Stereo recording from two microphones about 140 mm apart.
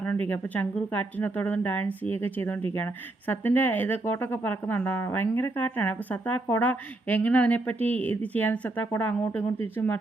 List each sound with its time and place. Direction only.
0.0 s speech: 10° left (ahead or behind)